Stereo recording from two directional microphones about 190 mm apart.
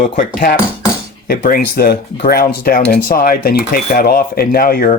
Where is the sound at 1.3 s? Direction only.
50° left (ahead or behind).